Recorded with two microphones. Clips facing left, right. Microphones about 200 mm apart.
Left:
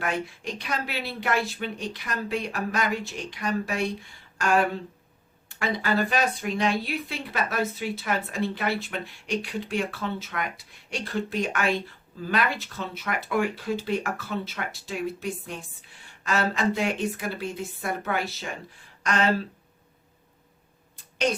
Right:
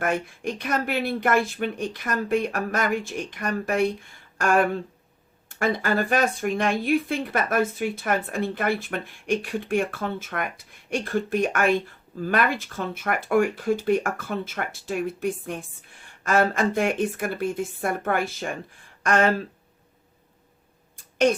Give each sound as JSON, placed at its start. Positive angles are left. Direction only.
{"t": 0.0, "sound": "speech", "side_deg": -50}
{"t": 21.2, "sound": "speech", "side_deg": -50}